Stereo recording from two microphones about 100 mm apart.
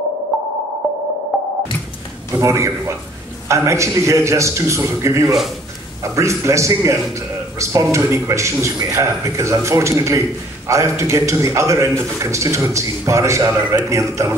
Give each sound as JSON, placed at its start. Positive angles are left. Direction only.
{"t": 0.3, "sound": "music", "side_deg": 0}
{"t": 2.3, "sound": "a man's voice", "side_deg": -30}